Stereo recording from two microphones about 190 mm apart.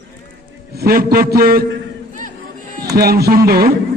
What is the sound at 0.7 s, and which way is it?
Speech, 55° right (ahead or behind).